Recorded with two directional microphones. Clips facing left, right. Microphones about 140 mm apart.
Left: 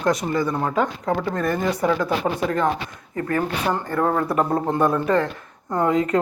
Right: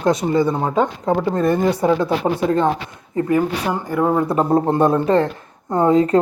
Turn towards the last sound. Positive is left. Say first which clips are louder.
# right 5 dB
turn(degrees=-30)  # may be behind; listen again after turning